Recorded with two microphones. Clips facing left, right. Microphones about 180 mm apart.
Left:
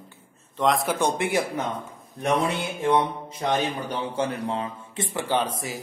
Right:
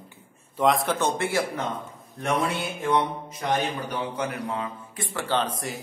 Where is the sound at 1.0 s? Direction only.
15° left (ahead or behind).